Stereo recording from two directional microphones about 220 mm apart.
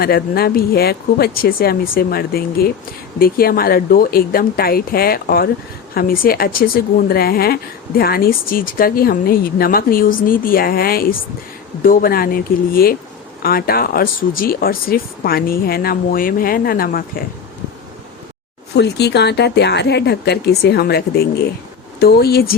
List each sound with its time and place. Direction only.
0.0 s a woman's voice: 45° left (ahead or behind)
18.8 s speech: 50° left (ahead or behind)